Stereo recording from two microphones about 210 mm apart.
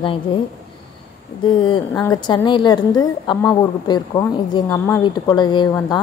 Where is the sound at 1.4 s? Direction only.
20° left (ahead or behind).